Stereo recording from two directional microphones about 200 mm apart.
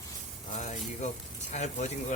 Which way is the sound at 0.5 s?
35° left (ahead or behind).